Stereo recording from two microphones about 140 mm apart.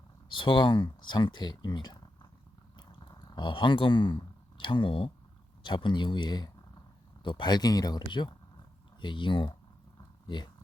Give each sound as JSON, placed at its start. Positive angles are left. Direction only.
{"t": 0.3, "sound": "speech", "side_deg": 35}
{"t": 2.7, "sound": "a sound", "side_deg": 35}
{"t": 5.6, "sound": "speech", "side_deg": 35}